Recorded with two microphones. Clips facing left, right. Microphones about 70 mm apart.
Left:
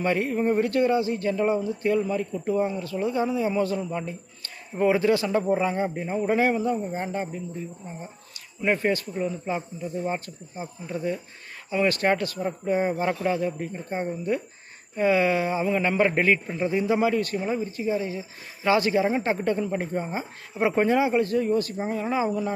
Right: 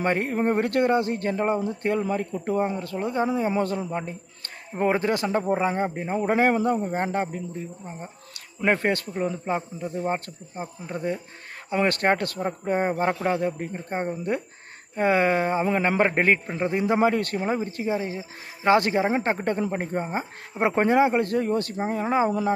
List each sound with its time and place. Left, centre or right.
0.0 s speech: right
8.3 s a sound: right
9.2 s a man's voice: right
16.5 s a man's voice: right
20.5 s speech: right
21.8 s a man's voice: right